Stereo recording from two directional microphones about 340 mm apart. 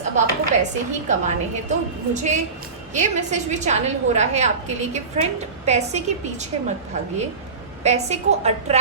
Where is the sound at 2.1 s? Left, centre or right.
Right.